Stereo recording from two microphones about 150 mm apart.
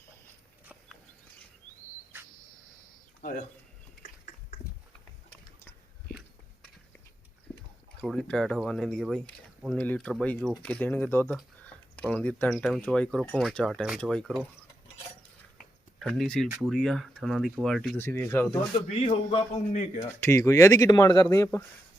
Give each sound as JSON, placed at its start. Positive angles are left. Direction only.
{"t": 3.2, "sound": "a sound", "side_deg": 60}
{"t": 7.5, "sound": "a sound", "side_deg": 10}
{"t": 8.0, "sound": "speech", "side_deg": 0}
{"t": 11.6, "sound": "a sound", "side_deg": 10}
{"t": 12.6, "sound": "speech", "side_deg": 5}
{"t": 16.0, "sound": "speech", "side_deg": 5}
{"t": 17.9, "sound": "speech", "side_deg": 15}
{"t": 18.9, "sound": "a man's voice", "side_deg": 40}
{"t": 20.0, "sound": "speech", "side_deg": 20}